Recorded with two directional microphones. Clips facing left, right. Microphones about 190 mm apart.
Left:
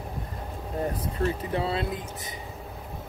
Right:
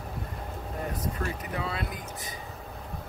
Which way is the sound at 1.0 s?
30° left (ahead or behind).